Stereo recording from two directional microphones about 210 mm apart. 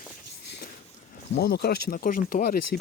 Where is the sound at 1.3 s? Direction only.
50° left (ahead or behind).